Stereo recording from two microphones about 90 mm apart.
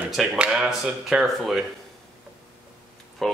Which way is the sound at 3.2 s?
5° left (ahead or behind).